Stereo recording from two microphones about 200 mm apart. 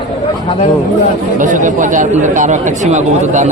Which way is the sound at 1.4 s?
40° right (ahead or behind).